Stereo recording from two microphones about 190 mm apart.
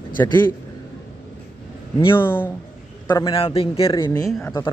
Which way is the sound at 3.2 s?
30° left (ahead or behind).